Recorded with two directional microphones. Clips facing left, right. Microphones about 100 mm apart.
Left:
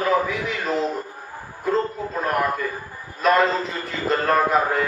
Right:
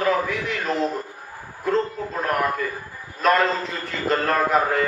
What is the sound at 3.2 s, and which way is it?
A man's voice, centre (ahead or behind).